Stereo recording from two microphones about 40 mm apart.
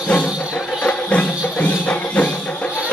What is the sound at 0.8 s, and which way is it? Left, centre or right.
Music, left.